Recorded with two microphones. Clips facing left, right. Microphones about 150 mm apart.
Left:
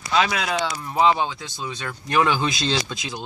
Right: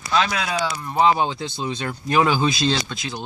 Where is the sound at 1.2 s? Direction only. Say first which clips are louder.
Right 4 dB; 25° right (ahead or behind).